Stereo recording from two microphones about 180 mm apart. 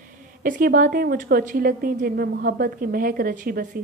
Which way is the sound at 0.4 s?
50° right (ahead or behind).